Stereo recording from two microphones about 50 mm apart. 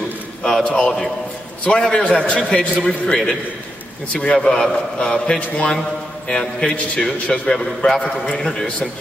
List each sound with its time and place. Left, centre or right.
0.7 s a man's voice: centre
4.1 s a man's voice: left
4.4 s a man's voice: centre